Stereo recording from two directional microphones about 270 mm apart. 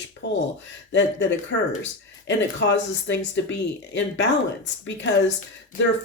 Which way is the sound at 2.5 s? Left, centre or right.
Left.